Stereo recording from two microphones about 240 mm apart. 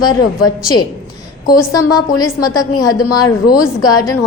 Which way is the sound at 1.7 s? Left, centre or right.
Centre.